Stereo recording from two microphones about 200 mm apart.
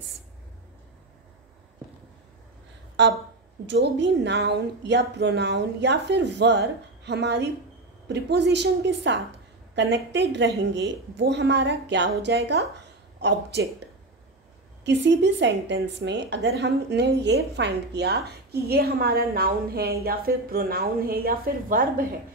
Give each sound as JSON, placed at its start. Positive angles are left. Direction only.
{"t": 3.6, "sound": "a woman's voice", "side_deg": -60}
{"t": 14.9, "sound": "a woman's voice", "side_deg": -60}